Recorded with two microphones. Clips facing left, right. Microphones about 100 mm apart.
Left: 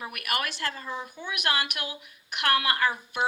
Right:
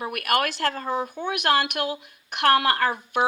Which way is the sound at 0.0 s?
35° right (ahead or behind).